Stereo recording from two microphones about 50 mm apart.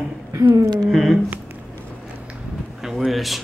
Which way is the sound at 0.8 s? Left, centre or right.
Centre.